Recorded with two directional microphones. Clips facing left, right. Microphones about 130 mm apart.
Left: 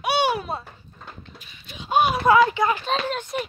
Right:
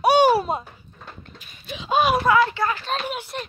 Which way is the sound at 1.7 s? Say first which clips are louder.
Right 1 dB; 90° right.